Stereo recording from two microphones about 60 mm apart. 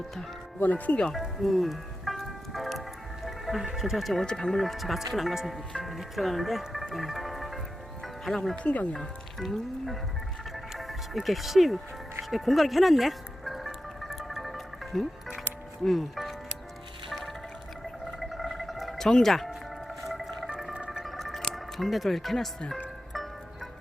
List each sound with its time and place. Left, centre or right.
0.6 s speech: left
1.4 s music: centre
3.2 s speech: centre
8.0 s music: centre
8.5 s speech: left
8.9 s speech: centre
10.5 s music: centre
15.8 s speech: centre
17.1 s music: centre
18.0 s gargling: centre
19.0 s speech: centre
20.1 s a sound: centre
20.9 s music: centre